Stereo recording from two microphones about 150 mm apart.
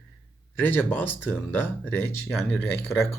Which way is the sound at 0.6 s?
15° left (ahead or behind).